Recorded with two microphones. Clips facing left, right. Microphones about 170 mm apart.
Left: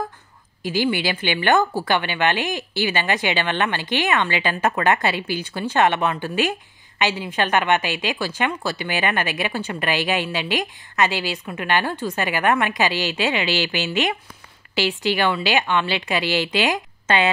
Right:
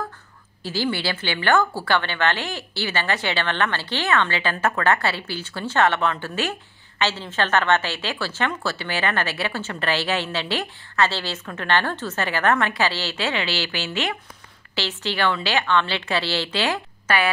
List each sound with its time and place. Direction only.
0.6 s a woman's voice: 15° left (ahead or behind)